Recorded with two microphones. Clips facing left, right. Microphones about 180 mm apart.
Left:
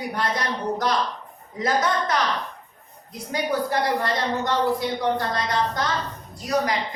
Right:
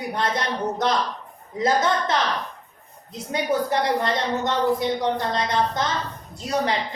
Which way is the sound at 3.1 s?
25° right (ahead or behind).